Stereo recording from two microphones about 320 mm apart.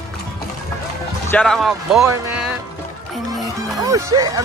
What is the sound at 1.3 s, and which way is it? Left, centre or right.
Speech, centre.